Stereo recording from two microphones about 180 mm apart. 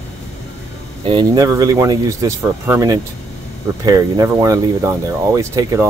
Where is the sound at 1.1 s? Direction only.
25° right (ahead or behind).